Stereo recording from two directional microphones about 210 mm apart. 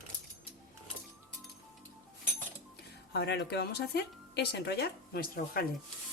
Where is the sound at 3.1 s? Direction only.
50° left (ahead or behind).